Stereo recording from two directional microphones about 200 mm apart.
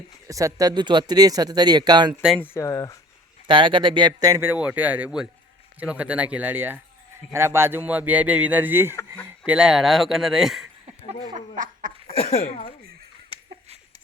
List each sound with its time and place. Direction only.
0.3 s speech: 15° right (ahead or behind)
2.2 s speech: 5° left (ahead or behind)
3.4 s speech: 25° right (ahead or behind); by 10.7 s centre (ahead or behind)
11.3 s a sound: 40° right (ahead or behind)
12.1 s speech: 30° left (ahead or behind)